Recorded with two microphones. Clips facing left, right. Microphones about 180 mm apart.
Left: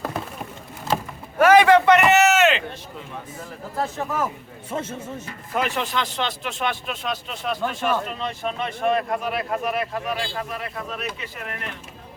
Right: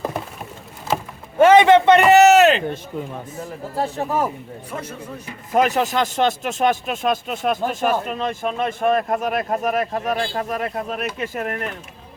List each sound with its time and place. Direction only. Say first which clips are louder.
1.4 s a sound: right 3 dB; 25° right (ahead or behind)
3.8 s speech: right 3 dB; 35° right (ahead or behind)
4.7 s speech: left 3 dB; 25° left (ahead or behind)
5.5 s speech: right 7 dB; 40° right (ahead or behind)